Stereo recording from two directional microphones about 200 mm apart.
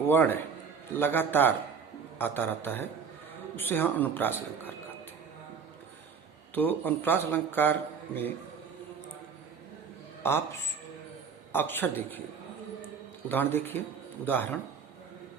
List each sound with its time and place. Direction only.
0.0 s a man's voice: 10° left (ahead or behind)
6.5 s a man's voice: 10° left (ahead or behind)
10.2 s speech: 10° left (ahead or behind)
11.5 s a man's voice: 10° left (ahead or behind)
13.2 s a man's voice: 10° left (ahead or behind)